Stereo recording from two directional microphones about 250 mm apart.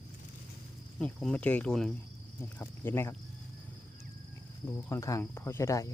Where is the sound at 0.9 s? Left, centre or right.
Centre.